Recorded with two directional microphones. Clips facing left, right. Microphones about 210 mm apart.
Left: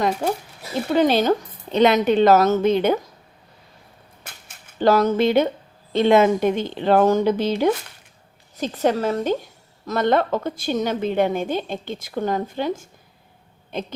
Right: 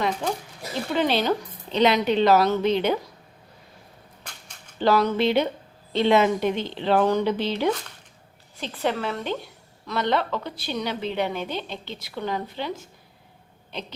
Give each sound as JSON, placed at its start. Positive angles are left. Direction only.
{"t": 0.2, "sound": "a woman's voice", "side_deg": 40}
{"t": 4.2, "sound": "dog", "side_deg": 5}
{"t": 4.8, "sound": "a woman's voice", "side_deg": 45}